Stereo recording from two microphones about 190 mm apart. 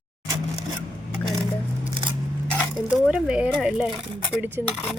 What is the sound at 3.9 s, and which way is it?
Speech, 25° right (ahead or behind).